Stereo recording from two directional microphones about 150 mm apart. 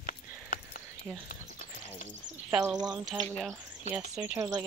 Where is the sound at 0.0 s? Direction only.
70° left (ahead or behind).